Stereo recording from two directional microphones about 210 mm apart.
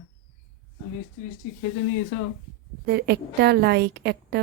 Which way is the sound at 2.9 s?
50° right (ahead or behind).